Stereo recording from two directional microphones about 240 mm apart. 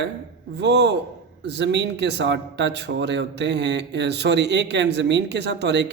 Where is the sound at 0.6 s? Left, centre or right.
Right.